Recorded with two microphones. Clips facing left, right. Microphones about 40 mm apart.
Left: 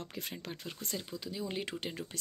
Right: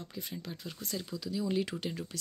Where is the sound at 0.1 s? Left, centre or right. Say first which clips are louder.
Even; left.